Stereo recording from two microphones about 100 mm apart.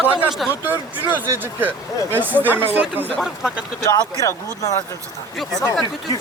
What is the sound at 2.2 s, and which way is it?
Speech, 20° right (ahead or behind).